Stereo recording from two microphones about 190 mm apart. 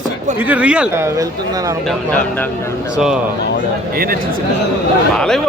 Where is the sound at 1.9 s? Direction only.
5° left (ahead or behind).